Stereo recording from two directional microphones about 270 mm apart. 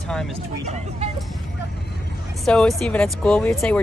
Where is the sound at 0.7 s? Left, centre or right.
Right.